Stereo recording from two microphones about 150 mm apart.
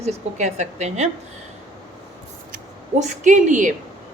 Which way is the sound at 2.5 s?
55° right (ahead or behind).